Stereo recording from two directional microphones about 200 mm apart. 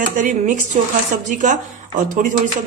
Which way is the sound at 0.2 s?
40° right (ahead or behind).